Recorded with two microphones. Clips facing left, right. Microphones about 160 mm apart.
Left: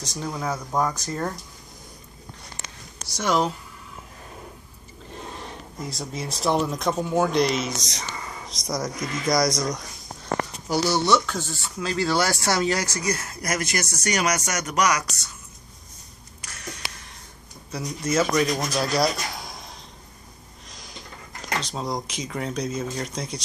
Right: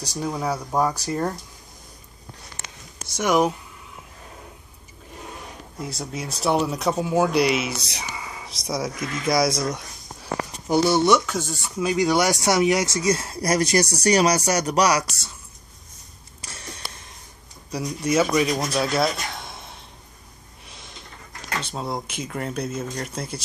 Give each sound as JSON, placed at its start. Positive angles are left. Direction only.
{"t": 0.2, "sound": "speech", "side_deg": -10}
{"t": 3.2, "sound": "speech", "side_deg": -15}
{"t": 5.8, "sound": "speech", "side_deg": 0}
{"t": 10.7, "sound": "speech", "side_deg": -20}
{"t": 11.1, "sound": "speech", "side_deg": -10}
{"t": 16.3, "sound": "a sound", "side_deg": -30}
{"t": 17.6, "sound": "speech", "side_deg": -10}
{"t": 18.8, "sound": "a sound", "side_deg": 0}
{"t": 21.6, "sound": "speech", "side_deg": -5}